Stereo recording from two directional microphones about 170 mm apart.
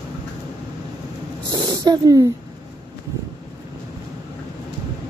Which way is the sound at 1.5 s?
25° right (ahead or behind).